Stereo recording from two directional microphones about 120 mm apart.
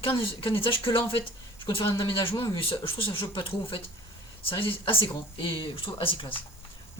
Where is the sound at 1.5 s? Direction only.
50° left (ahead or behind).